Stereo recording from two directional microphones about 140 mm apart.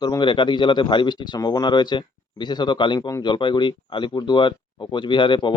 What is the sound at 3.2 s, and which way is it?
Speech, 35° left (ahead or behind).